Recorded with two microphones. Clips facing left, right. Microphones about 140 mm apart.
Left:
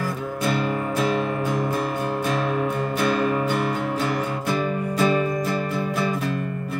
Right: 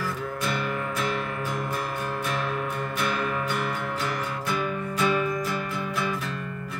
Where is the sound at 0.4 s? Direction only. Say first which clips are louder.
Left 7 dB; 35° left (ahead or behind).